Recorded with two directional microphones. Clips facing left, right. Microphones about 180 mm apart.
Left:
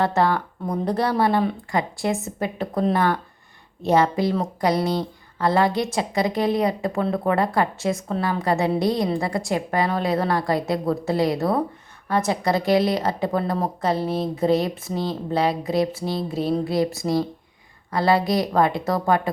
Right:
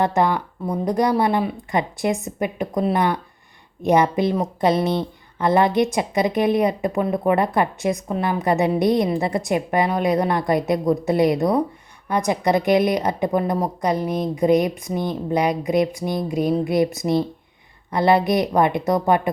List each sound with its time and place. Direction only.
0.0 s a woman's voice: 15° right (ahead or behind)